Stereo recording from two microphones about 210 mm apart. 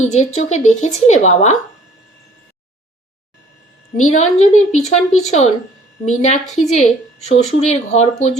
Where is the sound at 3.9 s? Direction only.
35° left (ahead or behind).